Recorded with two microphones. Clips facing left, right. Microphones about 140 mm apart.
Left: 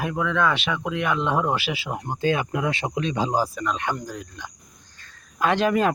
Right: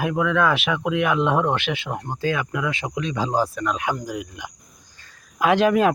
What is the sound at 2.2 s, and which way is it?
Speech, 25° left (ahead or behind).